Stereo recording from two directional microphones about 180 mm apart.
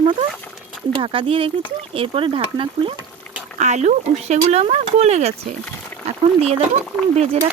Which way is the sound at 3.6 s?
40° right (ahead or behind).